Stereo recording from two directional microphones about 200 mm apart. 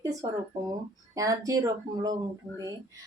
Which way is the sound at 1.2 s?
15° right (ahead or behind).